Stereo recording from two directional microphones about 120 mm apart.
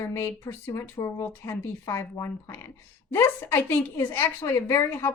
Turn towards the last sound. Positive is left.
turn(degrees=15)  # may be behind; listen again after turning